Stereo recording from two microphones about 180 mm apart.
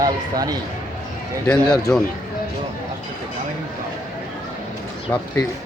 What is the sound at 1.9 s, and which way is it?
Speech, 5° left (ahead or behind).